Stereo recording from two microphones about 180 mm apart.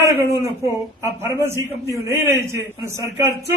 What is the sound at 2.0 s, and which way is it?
Speech, 15° right (ahead or behind).